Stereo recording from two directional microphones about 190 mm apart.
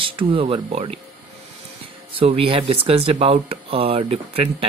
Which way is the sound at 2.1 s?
30° right (ahead or behind).